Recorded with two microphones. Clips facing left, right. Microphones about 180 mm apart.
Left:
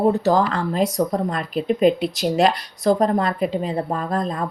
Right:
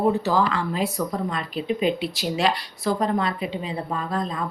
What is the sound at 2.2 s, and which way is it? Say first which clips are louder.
Speech: left 6 dB; 45° left (ahead or behind).